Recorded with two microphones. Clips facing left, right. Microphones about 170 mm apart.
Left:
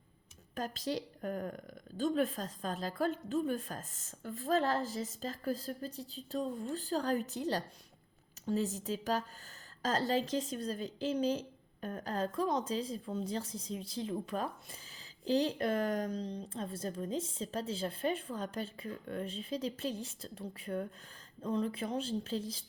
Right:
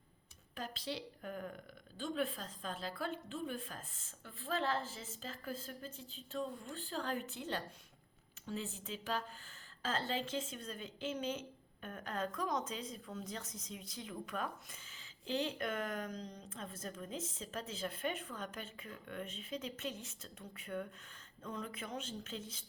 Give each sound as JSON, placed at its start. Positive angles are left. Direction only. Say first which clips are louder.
{"t": 0.5, "sound": "a woman's voice", "louder": "left 7 dB", "side_deg": 45}